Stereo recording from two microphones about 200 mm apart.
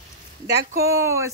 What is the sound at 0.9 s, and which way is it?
Speech, 15° right (ahead or behind).